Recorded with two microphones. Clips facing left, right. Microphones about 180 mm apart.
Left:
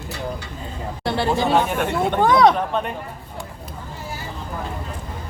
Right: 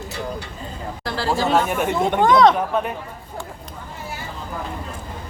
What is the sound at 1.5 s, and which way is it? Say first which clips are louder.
Speech: even; 5° right (ahead or behind).